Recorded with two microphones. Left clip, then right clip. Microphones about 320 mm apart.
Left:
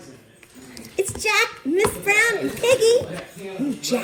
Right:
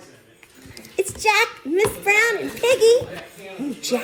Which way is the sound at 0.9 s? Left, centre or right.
Centre.